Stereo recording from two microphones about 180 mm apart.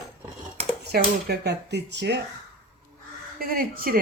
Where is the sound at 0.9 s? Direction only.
65° right (ahead or behind).